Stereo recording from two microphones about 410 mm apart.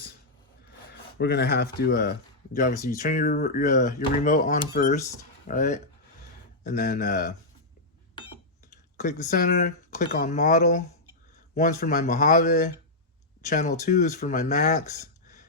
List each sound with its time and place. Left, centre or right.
1.2 s speech: left
9.0 s speech: centre